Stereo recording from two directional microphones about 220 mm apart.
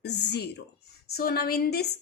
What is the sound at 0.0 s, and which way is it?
A woman's voice, 50° left (ahead or behind).